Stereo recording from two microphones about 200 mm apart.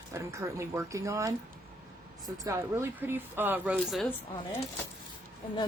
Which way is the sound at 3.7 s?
Centre (ahead or behind).